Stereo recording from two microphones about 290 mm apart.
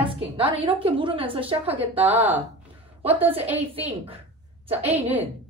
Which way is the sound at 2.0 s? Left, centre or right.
Centre.